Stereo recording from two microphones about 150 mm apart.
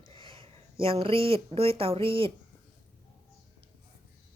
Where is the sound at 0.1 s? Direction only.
35° right (ahead or behind).